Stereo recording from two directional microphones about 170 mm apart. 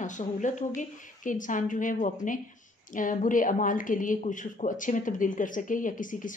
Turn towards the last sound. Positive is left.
turn(degrees=50)  # may be behind; listen again after turning